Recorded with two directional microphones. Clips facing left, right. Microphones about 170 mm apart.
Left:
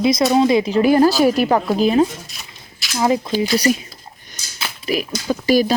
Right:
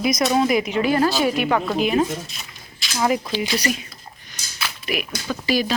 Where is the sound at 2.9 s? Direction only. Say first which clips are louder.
Left 3 dB; 20° left (ahead or behind).